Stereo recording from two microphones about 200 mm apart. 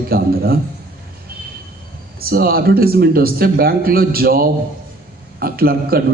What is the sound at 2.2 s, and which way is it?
A man's voice, 50° right (ahead or behind).